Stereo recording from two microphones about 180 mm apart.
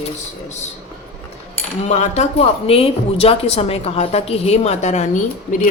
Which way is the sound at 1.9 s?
40° left (ahead or behind).